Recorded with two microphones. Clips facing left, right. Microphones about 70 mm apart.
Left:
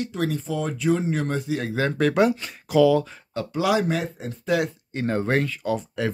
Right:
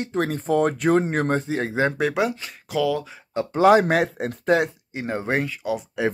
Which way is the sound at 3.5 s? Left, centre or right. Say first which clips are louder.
Right 7 dB; right.